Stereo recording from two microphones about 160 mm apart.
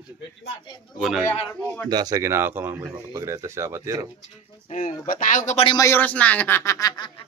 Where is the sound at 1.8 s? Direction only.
25° right (ahead or behind).